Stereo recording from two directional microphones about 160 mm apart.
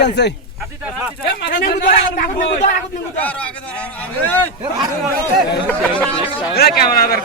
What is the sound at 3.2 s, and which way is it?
A man's voice, 10° left (ahead or behind).